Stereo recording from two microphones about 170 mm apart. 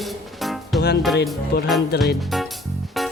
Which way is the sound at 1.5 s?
65° left (ahead or behind).